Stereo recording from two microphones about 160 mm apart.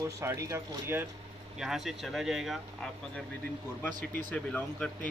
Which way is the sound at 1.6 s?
Centre (ahead or behind).